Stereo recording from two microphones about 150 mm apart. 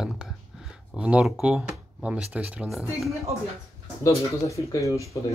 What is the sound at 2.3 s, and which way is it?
Speech, 10° right (ahead or behind).